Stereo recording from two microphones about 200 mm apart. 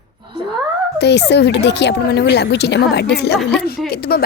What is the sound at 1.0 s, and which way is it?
A woman's voice, 55° left (ahead or behind).